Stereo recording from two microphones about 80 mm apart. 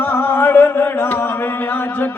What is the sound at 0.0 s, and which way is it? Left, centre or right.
Chant, left.